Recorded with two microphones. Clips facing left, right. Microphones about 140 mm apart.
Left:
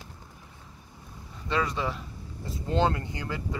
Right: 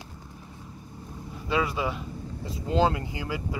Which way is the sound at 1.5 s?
5° right (ahead or behind).